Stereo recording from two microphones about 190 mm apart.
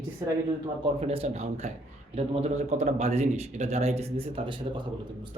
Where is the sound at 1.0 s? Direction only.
35° right (ahead or behind).